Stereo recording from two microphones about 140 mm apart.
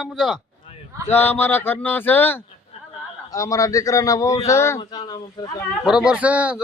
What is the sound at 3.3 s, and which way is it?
A man's voice, 25° left (ahead or behind).